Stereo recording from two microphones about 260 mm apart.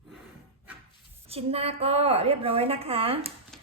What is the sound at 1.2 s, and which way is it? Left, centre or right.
A woman's voice, right.